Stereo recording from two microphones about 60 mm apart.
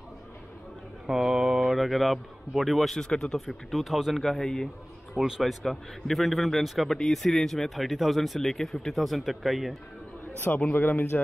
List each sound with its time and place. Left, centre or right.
1.0 s a man's voice: centre
5.1 s speech: centre
5.4 s speech: centre
10.7 s speech: left